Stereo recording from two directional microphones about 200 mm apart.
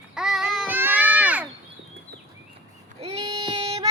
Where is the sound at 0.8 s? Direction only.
10° right (ahead or behind).